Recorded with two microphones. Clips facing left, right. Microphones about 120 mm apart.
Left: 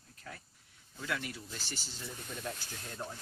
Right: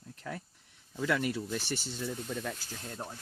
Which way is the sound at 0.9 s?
90° right.